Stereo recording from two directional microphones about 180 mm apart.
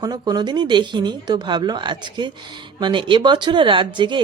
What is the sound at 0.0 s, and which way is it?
Speech, 20° right (ahead or behind).